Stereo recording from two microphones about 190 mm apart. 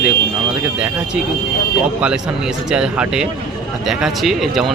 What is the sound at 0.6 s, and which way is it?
Speech, 5° right (ahead or behind).